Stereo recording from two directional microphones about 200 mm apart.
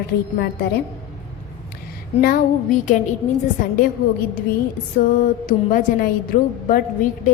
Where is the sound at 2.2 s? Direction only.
45° left (ahead or behind).